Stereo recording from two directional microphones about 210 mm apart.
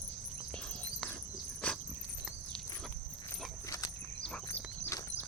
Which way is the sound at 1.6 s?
5° left (ahead or behind).